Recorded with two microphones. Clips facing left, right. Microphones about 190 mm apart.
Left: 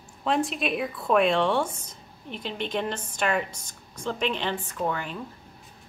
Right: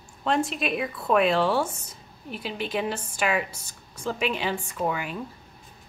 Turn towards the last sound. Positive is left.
turn(degrees=-10)  # may be behind; listen again after turning